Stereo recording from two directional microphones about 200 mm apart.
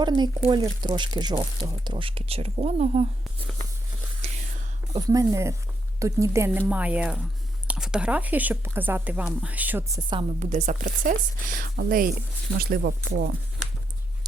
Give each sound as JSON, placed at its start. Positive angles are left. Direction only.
{"t": 0.0, "sound": "speech", "side_deg": -20}
{"t": 4.2, "sound": "whispering", "side_deg": -30}
{"t": 4.9, "sound": "a woman's voice", "side_deg": -15}
{"t": 10.4, "sound": "speech", "side_deg": -40}